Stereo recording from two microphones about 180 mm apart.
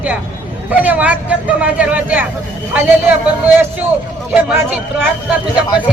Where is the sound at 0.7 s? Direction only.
10° right (ahead or behind).